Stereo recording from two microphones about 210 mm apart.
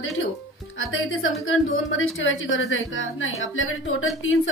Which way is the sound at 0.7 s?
70° left (ahead or behind).